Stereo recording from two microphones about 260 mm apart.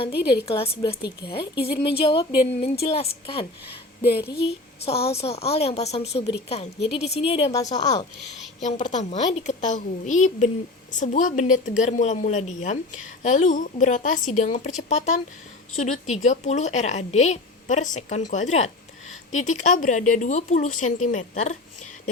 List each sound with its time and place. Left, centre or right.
0.1 s a woman's voice: left
0.4 s a woman's voice: left
4.0 s a woman's voice: left
4.9 s a woman's voice: left
8.6 s a woman's voice: left